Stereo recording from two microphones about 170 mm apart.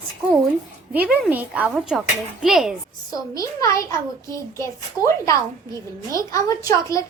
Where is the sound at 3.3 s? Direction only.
20° left (ahead or behind).